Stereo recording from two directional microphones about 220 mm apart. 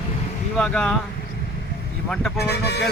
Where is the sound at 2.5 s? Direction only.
50° left (ahead or behind).